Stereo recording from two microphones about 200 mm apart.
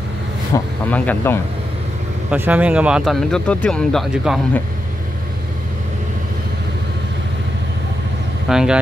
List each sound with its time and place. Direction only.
0.5 s speech: 15° left (ahead or behind)
2.3 s speech: 10° right (ahead or behind)
8.5 s speech: 5° right (ahead or behind)